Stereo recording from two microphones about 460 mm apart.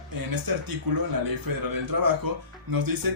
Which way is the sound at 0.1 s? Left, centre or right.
Right.